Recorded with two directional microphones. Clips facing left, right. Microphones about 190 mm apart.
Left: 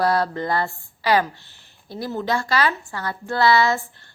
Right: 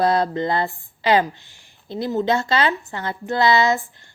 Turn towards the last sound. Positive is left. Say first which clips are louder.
# right 1 dB
turn(degrees=-20)  # may be behind; listen again after turning